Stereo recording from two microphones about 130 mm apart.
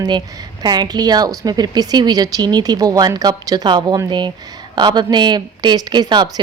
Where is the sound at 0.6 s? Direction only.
35° right (ahead or behind).